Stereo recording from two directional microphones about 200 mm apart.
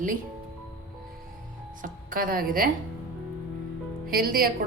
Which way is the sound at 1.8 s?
45° right (ahead or behind).